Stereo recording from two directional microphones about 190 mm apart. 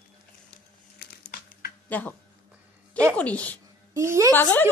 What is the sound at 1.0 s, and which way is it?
Crumpling, 55° left (ahead or behind).